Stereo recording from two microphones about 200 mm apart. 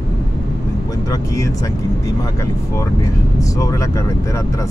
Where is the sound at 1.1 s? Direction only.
15° left (ahead or behind).